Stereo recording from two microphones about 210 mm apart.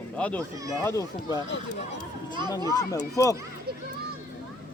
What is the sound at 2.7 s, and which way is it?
Speech, 15° left (ahead or behind).